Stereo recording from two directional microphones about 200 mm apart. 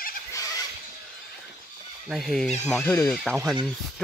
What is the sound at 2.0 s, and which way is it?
Speech, centre (ahead or behind).